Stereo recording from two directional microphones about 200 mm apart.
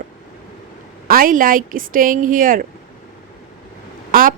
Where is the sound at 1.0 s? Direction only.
45° right (ahead or behind).